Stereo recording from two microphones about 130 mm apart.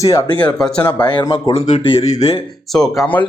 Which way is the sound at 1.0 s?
35° left (ahead or behind).